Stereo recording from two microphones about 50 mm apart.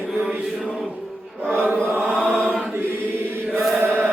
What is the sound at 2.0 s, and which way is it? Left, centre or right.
Chant, centre.